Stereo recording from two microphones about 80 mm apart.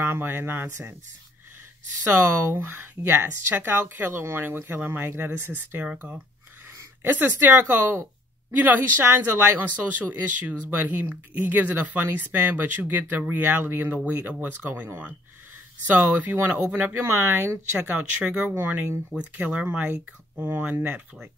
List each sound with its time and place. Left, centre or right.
0.0 s speech: right
2.0 s speech: right
15.9 s speech: centre
17.8 s speech: centre